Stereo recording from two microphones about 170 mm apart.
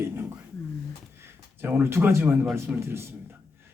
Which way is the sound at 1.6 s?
15° right (ahead or behind).